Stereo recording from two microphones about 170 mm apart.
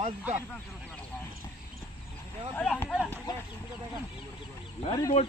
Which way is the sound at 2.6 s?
5° left (ahead or behind).